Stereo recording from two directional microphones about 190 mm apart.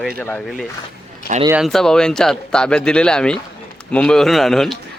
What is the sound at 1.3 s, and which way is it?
Speech, 40° right (ahead or behind).